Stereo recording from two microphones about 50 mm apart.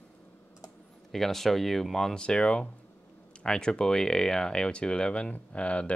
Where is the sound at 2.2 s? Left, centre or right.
Centre.